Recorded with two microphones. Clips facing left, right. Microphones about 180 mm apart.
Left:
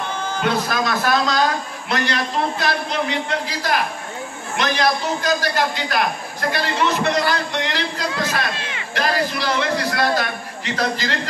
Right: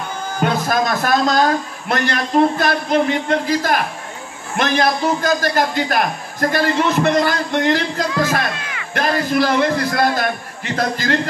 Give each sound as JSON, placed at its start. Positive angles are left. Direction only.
{"t": 0.4, "sound": "a man's voice", "side_deg": -50}
{"t": 8.5, "sound": "a sound", "side_deg": 25}
{"t": 8.9, "sound": "a man's voice", "side_deg": -50}